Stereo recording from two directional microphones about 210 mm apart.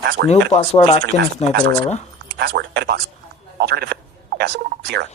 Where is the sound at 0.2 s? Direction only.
45° right (ahead or behind).